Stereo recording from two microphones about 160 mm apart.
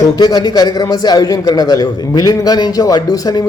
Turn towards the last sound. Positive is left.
turn(degrees=20)  # may be behind; listen again after turning